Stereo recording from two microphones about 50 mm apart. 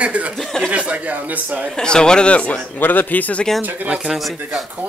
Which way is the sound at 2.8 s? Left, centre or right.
Left.